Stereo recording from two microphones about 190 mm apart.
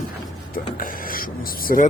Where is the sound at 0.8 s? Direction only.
45° left (ahead or behind).